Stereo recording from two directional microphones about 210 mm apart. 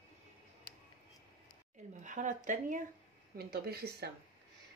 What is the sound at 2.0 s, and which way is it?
Speech, 35° right (ahead or behind).